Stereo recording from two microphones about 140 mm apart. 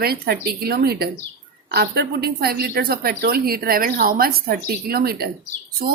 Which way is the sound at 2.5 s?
90° right.